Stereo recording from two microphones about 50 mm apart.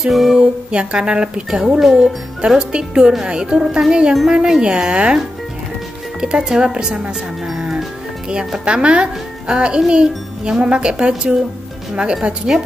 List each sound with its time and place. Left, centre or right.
0.0 s music: centre
0.4 s speech: centre
6.2 s speech: centre
8.6 s a child's voice: right